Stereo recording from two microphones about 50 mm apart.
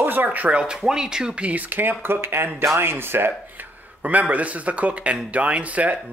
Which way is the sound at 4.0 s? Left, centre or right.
Right.